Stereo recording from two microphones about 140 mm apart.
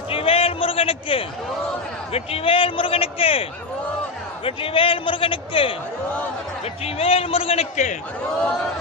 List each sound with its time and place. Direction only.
0.1 s a sound: 40° left (ahead or behind)
2.1 s a man's voice: 45° left (ahead or behind)
4.4 s a man's voice: 40° left (ahead or behind)
6.8 s a man's voice: 45° left (ahead or behind)